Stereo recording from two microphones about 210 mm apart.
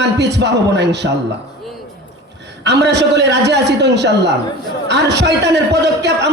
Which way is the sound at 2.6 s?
55° right (ahead or behind).